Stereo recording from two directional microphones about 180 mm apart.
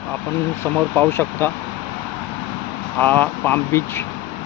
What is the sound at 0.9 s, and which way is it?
Speech, 10° left (ahead or behind).